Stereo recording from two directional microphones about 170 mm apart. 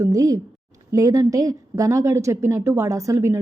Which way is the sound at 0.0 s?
20° right (ahead or behind).